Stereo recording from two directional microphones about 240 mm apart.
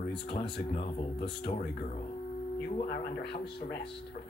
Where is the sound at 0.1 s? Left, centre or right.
Left.